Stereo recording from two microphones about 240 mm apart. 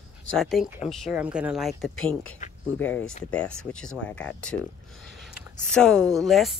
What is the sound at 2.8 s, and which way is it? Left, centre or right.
Speech, centre.